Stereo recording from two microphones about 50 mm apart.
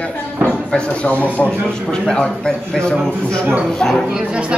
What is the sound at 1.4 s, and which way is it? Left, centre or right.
Speech, centre.